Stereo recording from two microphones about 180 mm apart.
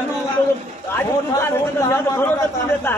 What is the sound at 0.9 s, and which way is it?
A man's voice, 15° left (ahead or behind).